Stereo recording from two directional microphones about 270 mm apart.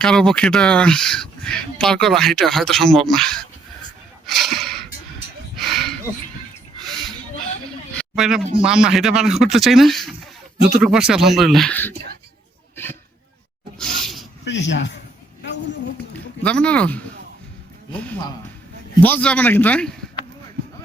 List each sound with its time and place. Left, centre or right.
0.0 s speech: centre
4.3 s gasp: centre
5.5 s a sound: centre
7.9 s speech: centre
13.7 s roar: centre
14.4 s speech: left
16.1 s speech: centre